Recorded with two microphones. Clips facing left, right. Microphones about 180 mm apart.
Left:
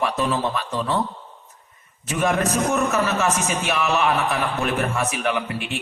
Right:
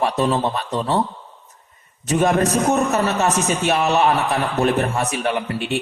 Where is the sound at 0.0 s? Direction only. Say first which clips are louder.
Right 3 dB; 35° right (ahead or behind).